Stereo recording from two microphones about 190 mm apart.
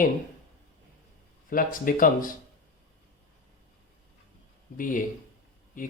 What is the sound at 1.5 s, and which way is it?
Speech, 45° left (ahead or behind).